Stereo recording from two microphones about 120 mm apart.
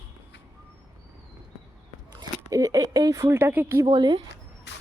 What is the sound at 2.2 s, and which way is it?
Speech, 30° right (ahead or behind).